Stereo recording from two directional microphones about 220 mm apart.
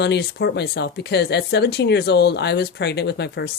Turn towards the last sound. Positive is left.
turn(degrees=50)  # may be behind; listen again after turning